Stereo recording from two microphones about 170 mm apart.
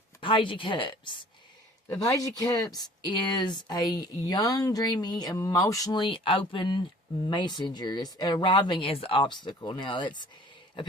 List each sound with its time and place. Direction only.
0.2 s a woman's voice: 30° left (ahead or behind)